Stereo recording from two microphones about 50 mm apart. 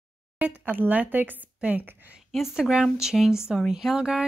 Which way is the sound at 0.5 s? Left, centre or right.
Right.